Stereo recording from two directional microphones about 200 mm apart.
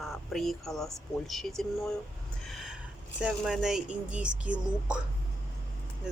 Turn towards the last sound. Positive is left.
turn(degrees=-5)  # may be behind; listen again after turning